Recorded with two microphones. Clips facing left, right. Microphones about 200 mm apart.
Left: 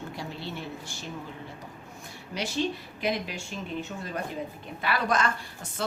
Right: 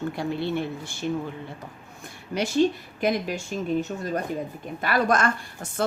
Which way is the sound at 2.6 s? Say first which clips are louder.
Right 8 dB; 50° right (ahead or behind).